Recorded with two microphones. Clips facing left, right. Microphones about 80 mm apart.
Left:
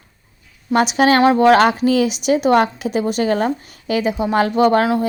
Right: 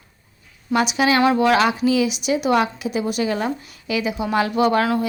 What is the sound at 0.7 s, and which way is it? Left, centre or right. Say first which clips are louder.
A woman's voice: left 4 dB; left.